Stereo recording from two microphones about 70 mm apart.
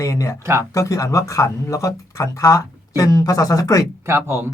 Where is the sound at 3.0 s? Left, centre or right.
Left.